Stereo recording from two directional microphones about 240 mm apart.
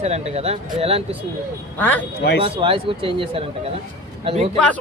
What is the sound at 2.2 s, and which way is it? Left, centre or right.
Speech, left.